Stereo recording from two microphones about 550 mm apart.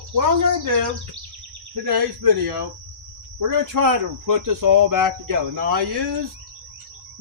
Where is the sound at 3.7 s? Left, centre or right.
Right.